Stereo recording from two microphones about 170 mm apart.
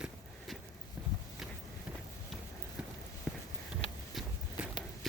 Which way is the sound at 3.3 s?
5° right (ahead or behind).